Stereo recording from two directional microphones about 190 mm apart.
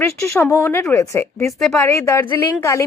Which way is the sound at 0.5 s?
10° left (ahead or behind).